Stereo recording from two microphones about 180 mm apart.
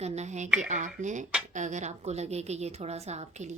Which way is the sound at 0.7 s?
40° right (ahead or behind).